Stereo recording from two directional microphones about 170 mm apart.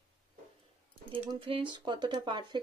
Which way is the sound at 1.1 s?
30° right (ahead or behind).